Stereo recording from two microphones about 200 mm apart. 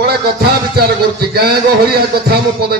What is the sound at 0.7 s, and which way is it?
A man's voice, 50° right (ahead or behind).